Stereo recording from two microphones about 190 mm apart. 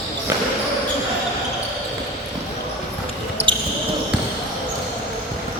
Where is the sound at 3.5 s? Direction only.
25° right (ahead or behind).